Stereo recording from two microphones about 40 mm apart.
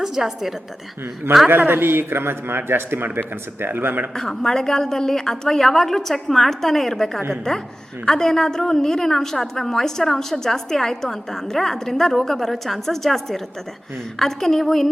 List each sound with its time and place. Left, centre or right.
0.0 s a woman's voice: centre
1.5 s a man's voice: right
4.1 s a woman's voice: centre